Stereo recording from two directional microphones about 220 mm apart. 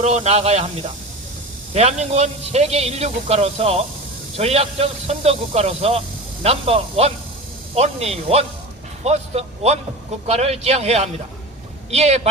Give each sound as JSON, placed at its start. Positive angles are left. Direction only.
{"t": 0.0, "sound": "speech", "side_deg": -30}
{"t": 1.7, "sound": "speech", "side_deg": -30}